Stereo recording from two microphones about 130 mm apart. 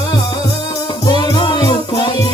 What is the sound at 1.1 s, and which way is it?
Music, 35° left (ahead or behind).